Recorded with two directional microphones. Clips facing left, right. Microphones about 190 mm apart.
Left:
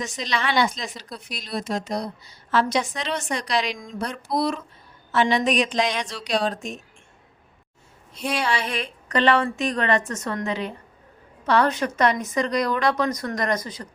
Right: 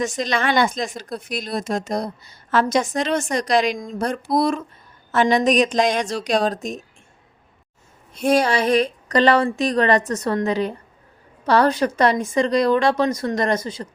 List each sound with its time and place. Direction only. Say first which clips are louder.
0.0 s speech: right 5 dB; 50° right (ahead or behind)
8.1 s a woman's voice: right 8 dB; 45° right (ahead or behind); by 13.8 s 25° right (ahead or behind)